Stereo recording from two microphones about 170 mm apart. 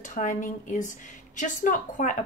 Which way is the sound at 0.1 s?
50° left (ahead or behind).